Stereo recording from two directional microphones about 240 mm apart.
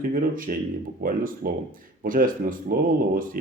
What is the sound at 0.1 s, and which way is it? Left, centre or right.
Speech, right.